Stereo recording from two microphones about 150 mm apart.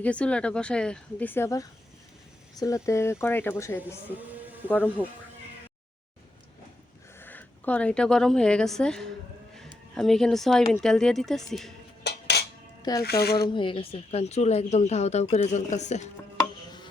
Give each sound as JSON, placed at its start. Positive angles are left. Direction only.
{"t": 0.0, "sound": "speech", "side_deg": 10}
{"t": 7.2, "sound": "a woman's voice", "side_deg": 10}
{"t": 12.0, "sound": "cutlery", "side_deg": 90}
{"t": 13.0, "sound": "speech", "side_deg": 90}
{"t": 13.5, "sound": "speech", "side_deg": 35}